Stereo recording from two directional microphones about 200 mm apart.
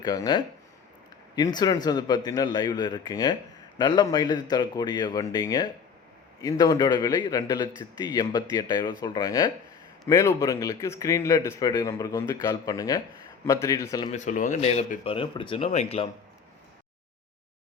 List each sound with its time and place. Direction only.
0.0 s a man's voice: 20° left (ahead or behind)
14.1 s speech: 40° left (ahead or behind)